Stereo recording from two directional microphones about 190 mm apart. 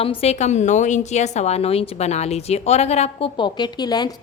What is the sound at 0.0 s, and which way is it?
A woman's voice, 30° left (ahead or behind).